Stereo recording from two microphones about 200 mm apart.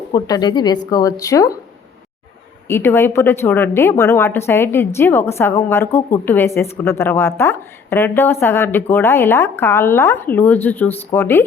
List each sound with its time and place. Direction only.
0.1 s a woman's voice: 20° left (ahead or behind)
2.6 s a woman's voice: 10° left (ahead or behind)